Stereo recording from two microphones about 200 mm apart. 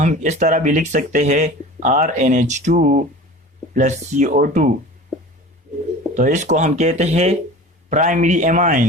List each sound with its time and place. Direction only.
0.0 s speech: 40° right (ahead or behind)
6.1 s speech: 40° right (ahead or behind)